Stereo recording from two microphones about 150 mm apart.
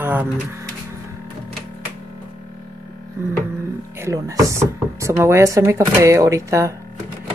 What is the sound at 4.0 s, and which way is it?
Speech, 20° right (ahead or behind).